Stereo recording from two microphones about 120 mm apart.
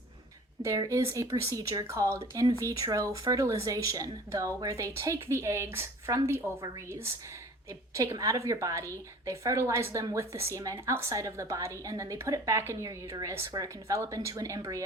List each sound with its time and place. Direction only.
0.6 s speech: 25° right (ahead or behind)